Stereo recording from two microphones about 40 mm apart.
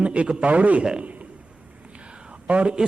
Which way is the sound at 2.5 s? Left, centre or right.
Right.